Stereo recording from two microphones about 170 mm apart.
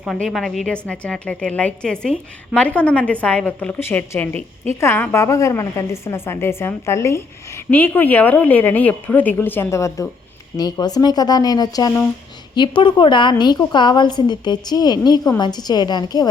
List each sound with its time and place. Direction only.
0.0 s a woman's voice: centre (ahead or behind); by 16.3 s 25° left (ahead or behind)